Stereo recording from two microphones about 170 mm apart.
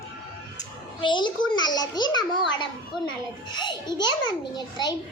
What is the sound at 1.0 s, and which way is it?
A child's voice, 30° left (ahead or behind).